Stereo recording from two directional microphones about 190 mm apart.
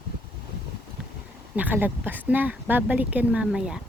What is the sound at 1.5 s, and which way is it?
Speech, 10° right (ahead or behind).